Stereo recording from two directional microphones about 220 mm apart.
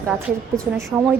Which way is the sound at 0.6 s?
5° left (ahead or behind).